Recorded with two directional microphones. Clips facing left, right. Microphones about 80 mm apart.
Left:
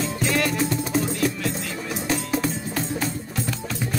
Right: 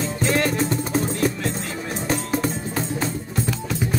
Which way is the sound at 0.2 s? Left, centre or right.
Right.